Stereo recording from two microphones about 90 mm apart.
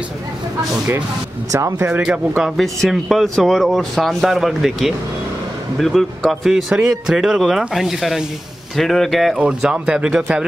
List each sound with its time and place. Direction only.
1.5 s speech: 35° right (ahead or behind)
1.9 s speech: 10° right (ahead or behind)